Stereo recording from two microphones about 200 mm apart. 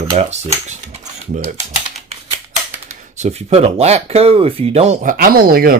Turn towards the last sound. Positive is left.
turn(degrees=-45)  # may be behind; listen again after turning